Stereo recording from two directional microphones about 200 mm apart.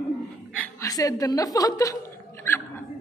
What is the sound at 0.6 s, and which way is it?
Chuckle, 15° left (ahead or behind).